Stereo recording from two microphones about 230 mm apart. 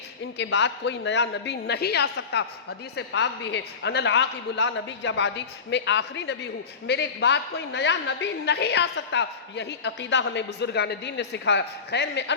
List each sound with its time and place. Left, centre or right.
0.3 s a man's voice: left